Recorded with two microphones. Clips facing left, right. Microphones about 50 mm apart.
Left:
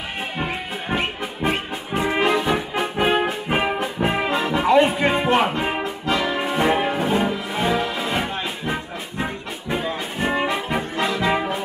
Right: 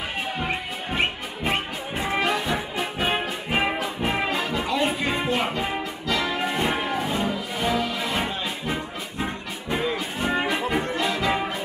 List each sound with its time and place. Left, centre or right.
2.0 s brass instrument: left
3.4 s music: left
10.2 s brass instrument: left